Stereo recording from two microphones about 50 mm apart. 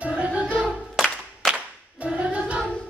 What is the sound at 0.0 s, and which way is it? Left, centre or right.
Music, right.